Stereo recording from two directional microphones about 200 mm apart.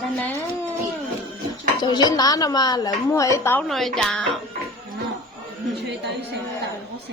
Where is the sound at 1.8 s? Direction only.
20° left (ahead or behind).